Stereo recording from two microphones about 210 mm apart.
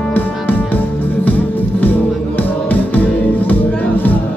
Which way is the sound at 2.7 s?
10° left (ahead or behind).